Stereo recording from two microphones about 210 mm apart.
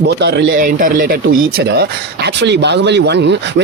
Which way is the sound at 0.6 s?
40° right (ahead or behind).